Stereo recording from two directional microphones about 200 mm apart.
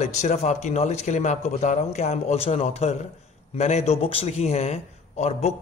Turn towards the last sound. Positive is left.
turn(degrees=35)  # may be behind; listen again after turning